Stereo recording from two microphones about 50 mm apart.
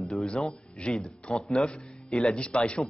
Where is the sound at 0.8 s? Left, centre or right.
Left.